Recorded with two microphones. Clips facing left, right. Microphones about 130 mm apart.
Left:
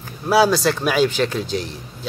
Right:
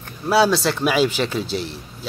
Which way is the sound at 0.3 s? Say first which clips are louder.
Left 1 dB; centre (ahead or behind).